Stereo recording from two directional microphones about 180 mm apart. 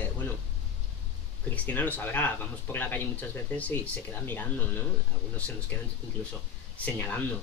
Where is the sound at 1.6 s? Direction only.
10° left (ahead or behind).